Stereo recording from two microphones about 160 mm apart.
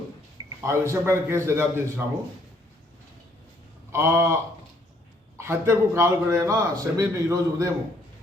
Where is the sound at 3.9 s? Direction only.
15° right (ahead or behind).